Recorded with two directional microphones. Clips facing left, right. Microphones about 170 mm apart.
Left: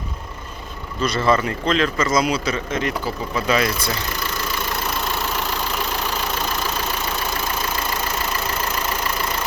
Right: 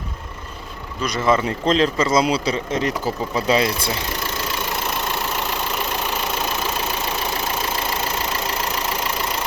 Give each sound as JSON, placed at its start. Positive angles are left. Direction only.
{"t": 1.0, "sound": "speech", "side_deg": -15}
{"t": 1.6, "sound": "speech", "side_deg": -30}